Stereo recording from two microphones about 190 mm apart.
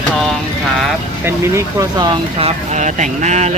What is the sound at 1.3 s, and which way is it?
Speech, 15° right (ahead or behind).